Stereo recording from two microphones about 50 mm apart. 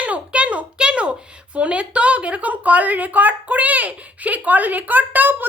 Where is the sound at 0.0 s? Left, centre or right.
Right.